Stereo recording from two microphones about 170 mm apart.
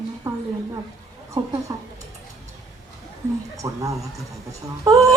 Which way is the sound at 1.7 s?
20° right (ahead or behind).